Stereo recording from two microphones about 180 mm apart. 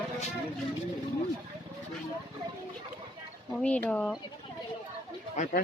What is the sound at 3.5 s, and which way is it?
Speech, 5° left (ahead or behind).